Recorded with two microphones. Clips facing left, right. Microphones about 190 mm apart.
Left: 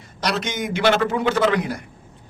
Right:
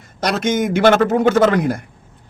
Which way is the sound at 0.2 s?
50° right (ahead or behind).